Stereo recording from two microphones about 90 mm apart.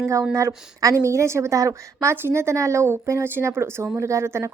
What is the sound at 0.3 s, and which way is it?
A woman's voice, 35° right (ahead or behind).